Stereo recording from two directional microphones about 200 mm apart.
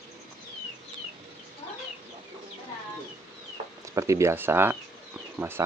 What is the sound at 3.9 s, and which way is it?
Speech, 15° right (ahead or behind).